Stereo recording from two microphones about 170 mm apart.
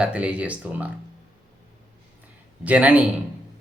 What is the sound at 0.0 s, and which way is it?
Speech, 5° right (ahead or behind).